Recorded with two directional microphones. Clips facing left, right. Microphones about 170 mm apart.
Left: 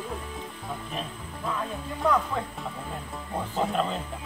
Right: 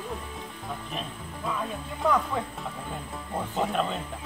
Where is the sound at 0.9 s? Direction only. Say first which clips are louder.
Left 1 dB; centre (ahead or behind).